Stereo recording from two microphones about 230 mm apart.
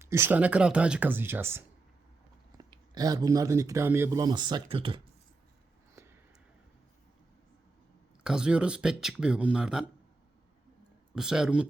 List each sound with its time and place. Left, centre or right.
0.0 s speech: centre
8.2 s speech: centre
11.1 s speech: centre